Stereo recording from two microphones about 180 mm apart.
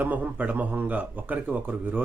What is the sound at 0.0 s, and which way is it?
Speech, 10° right (ahead or behind).